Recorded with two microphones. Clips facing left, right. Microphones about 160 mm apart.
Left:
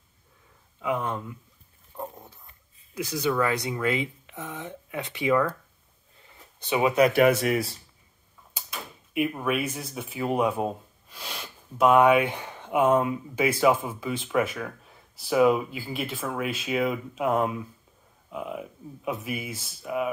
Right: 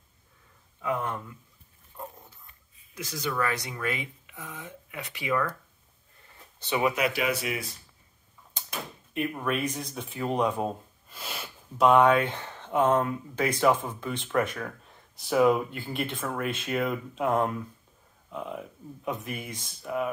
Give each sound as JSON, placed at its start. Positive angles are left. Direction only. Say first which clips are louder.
{"t": 0.7, "sound": "speech", "louder": "left 2 dB", "side_deg": 15}
{"t": 1.9, "sound": "dog", "louder": "left 5 dB", "side_deg": 25}
{"t": 3.1, "sound": "speech", "louder": "left 5 dB", "side_deg": 20}
{"t": 6.6, "sound": "speech", "louder": "left 3 dB", "side_deg": 20}
{"t": 7.1, "sound": "speech", "louder": "left 9 dB", "side_deg": 55}
{"t": 9.1, "sound": "speech", "louder": "left 3 dB", "side_deg": 10}